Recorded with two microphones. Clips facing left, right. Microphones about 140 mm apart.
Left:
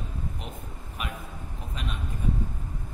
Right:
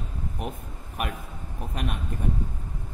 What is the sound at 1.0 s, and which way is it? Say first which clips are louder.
Speech: right 5 dB; 50° right (ahead or behind).